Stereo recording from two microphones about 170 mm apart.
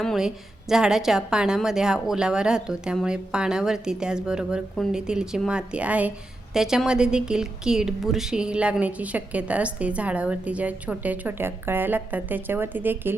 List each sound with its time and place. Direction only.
0.0 s a woman's voice: centre (ahead or behind)